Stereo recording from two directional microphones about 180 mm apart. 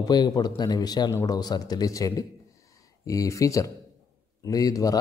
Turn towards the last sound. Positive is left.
turn(degrees=20)  # may be behind; listen again after turning